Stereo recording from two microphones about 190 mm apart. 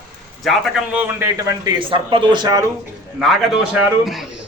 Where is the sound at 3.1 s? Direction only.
Centre (ahead or behind).